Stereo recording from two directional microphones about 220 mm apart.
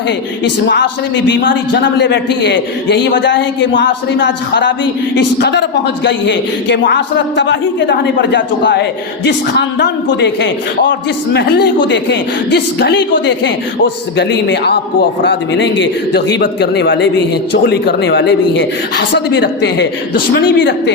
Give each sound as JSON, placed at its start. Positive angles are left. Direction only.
{"t": 0.4, "sound": "a man's voice", "side_deg": 50}